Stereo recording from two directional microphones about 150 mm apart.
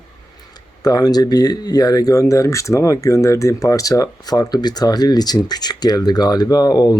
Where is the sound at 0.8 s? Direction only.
25° left (ahead or behind).